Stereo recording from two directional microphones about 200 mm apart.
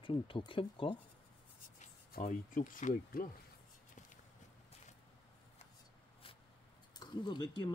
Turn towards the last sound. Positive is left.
turn(degrees=20)  # may be behind; listen again after turning